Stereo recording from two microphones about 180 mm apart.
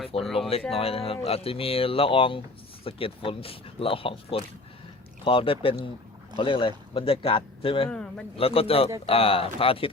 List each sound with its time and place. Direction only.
0.1 s a sound: 30° left (ahead or behind)
0.7 s speech: 35° left (ahead or behind)
7.9 s speech: 5° left (ahead or behind)
8.4 s speech: 30° left (ahead or behind)